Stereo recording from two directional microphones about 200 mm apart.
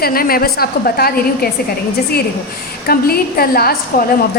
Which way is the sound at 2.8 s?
50° left (ahead or behind).